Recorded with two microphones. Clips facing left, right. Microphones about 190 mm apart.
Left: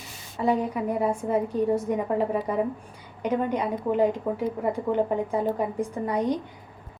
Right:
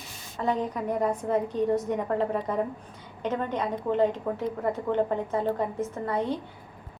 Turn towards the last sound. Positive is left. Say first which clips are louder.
# left 3 dB
turn(degrees=15)  # may be behind; listen again after turning